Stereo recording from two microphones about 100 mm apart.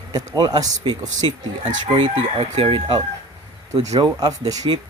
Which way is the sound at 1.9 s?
65° right (ahead or behind).